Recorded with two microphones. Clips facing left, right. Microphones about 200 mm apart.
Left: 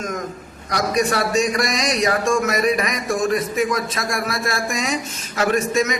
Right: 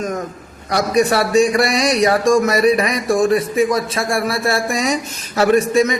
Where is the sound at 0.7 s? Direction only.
30° right (ahead or behind).